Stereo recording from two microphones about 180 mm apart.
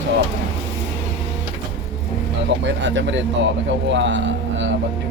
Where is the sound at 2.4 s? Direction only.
90° right.